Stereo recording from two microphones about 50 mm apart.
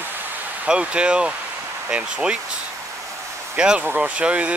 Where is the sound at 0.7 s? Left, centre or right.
Centre.